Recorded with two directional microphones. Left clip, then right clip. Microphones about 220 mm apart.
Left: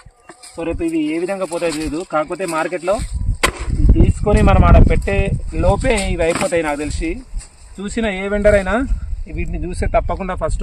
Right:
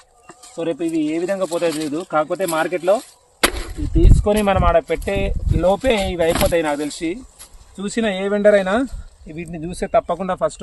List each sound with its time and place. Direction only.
0.5 s speech: 5° right (ahead or behind)
4.2 s speech: centre (ahead or behind)